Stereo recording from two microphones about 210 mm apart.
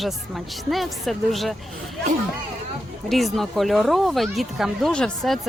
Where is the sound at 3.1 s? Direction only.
Centre (ahead or behind).